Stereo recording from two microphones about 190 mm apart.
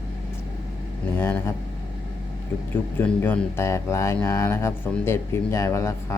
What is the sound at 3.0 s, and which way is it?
Speech, 10° left (ahead or behind).